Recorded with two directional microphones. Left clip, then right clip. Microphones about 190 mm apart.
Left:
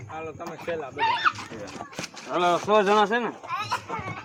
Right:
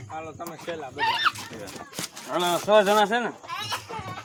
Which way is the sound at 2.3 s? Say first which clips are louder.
Right 1 dB; 25° right (ahead or behind).